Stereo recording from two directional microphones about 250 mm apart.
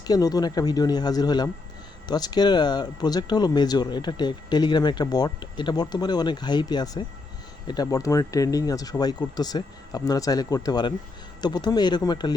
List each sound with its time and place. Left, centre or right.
0.0 s speech: centre